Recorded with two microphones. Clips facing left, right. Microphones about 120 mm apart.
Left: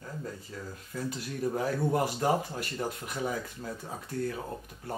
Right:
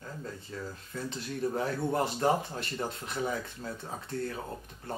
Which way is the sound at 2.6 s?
25° right (ahead or behind).